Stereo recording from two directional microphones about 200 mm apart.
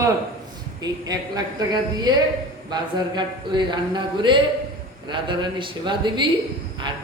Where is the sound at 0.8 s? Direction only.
20° right (ahead or behind).